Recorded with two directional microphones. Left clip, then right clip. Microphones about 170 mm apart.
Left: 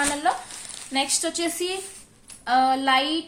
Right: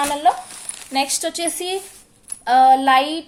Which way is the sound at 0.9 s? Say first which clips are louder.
Right 4 dB; 35° right (ahead or behind).